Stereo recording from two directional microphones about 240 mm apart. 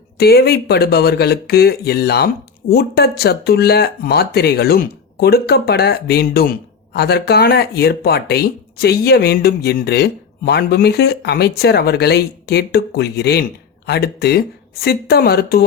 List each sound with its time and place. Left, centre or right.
0.2 s speech: left